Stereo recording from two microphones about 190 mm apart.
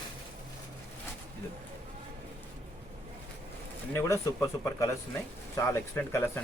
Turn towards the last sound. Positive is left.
turn(degrees=10)  # may be behind; listen again after turning